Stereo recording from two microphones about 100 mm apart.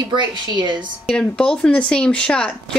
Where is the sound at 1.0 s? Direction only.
10° left (ahead or behind).